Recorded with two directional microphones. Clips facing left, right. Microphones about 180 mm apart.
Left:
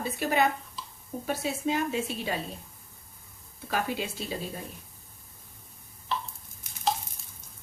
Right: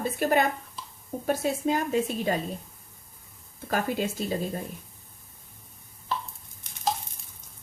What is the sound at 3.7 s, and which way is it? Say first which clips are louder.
Speech: right 3 dB; 45° right (ahead or behind).